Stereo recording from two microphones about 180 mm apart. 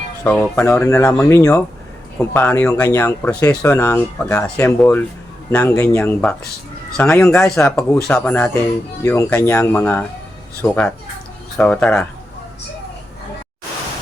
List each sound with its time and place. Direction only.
0.3 s speech: 10° left (ahead or behind)